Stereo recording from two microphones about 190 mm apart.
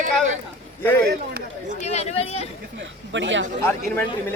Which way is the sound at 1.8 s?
35° left (ahead or behind).